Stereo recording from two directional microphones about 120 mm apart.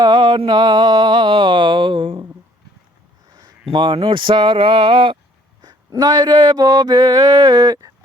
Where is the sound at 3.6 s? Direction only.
45° right (ahead or behind).